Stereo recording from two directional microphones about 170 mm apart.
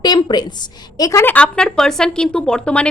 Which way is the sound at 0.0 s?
25° left (ahead or behind).